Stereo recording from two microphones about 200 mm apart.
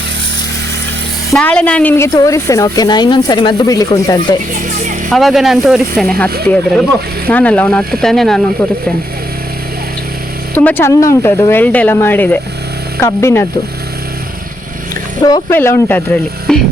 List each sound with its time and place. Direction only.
1.3 s speech: 5° left (ahead or behind)
5.0 s speech: centre (ahead or behind)
10.5 s speech: 10° left (ahead or behind)
15.2 s speech: 15° left (ahead or behind)